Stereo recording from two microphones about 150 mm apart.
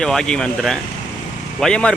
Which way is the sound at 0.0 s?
5° left (ahead or behind).